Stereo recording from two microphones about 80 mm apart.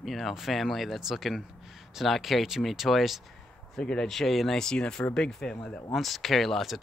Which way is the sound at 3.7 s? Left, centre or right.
Centre.